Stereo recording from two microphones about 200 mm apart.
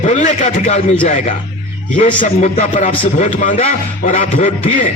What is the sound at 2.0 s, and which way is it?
Speech, 35° left (ahead or behind).